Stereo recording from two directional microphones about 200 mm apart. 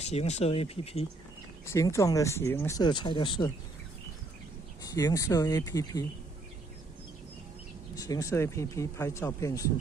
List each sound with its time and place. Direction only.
0.0 s speech: 35° left (ahead or behind)
1.6 s speech: 15° left (ahead or behind)
4.9 s speech: 15° left (ahead or behind)
7.9 s speech: 20° left (ahead or behind)